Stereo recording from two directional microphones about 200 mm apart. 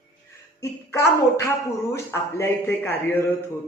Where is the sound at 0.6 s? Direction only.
15° left (ahead or behind).